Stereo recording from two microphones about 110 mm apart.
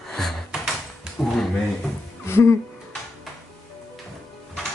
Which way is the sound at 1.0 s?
5° left (ahead or behind).